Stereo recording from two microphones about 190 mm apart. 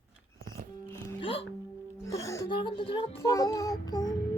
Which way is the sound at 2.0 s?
15° left (ahead or behind).